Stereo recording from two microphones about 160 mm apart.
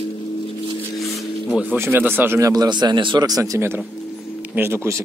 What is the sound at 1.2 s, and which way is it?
Speech, 5° right (ahead or behind).